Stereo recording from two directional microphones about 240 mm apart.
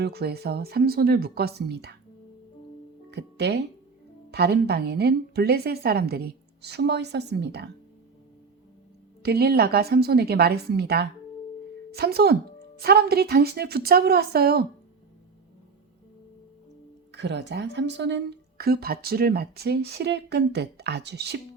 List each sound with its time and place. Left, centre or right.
0.0 s speech: right
3.1 s speech: right
9.2 s a woman's voice: right
17.1 s speech: right